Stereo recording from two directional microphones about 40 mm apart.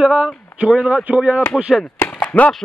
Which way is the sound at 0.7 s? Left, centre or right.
Right.